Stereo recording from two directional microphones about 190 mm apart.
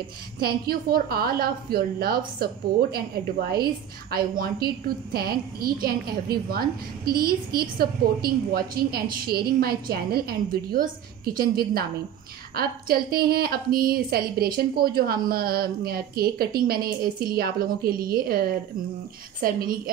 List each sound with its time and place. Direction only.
0.4 s a woman's voice: 55° right (ahead or behind)